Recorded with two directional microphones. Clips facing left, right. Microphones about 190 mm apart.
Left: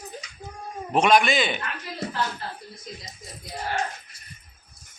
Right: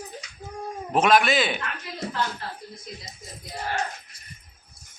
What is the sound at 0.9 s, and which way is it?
Speech, 5° right (ahead or behind).